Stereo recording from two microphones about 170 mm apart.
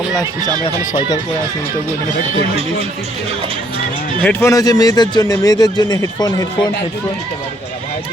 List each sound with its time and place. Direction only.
4.2 s speech: 10° left (ahead or behind)